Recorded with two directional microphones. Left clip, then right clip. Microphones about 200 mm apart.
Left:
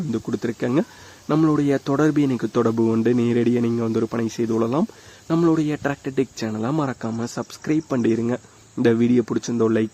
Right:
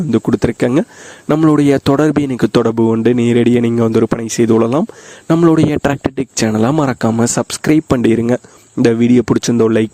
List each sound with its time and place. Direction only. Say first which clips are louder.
0.1 s speech: right 12 dB; 45° right (ahead or behind)